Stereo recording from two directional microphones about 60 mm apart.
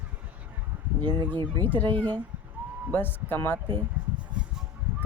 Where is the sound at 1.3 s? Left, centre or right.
Left.